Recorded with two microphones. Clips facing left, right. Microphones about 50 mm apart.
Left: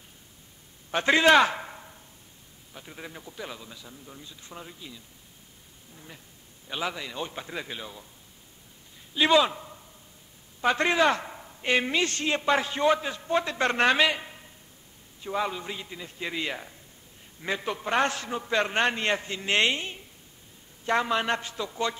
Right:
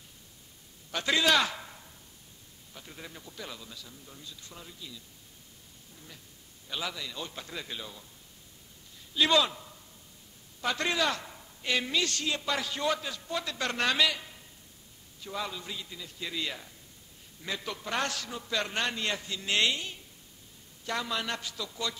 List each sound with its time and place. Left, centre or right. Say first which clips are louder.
0.9 s a man's voice: left 7 dB; left
2.7 s a man's voice: left 4 dB; centre
6.7 s a man's voice: left 4 dB; left
9.1 s a man's voice: left 4 dB; left